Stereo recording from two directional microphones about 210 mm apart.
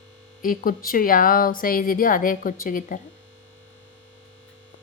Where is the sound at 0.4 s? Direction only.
40° left (ahead or behind).